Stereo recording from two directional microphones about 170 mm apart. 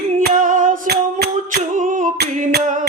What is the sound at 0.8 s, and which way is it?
Music, 70° right (ahead or behind).